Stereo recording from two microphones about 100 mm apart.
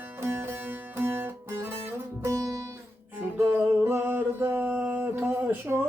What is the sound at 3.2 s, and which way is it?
Music, 20° right (ahead or behind).